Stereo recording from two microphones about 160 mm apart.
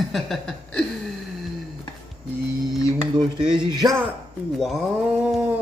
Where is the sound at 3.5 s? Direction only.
30° right (ahead or behind).